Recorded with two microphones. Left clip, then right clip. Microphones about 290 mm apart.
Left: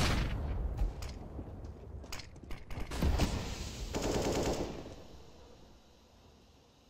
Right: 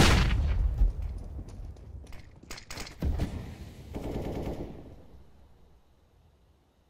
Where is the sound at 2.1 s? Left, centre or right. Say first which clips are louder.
Left 10 dB; left.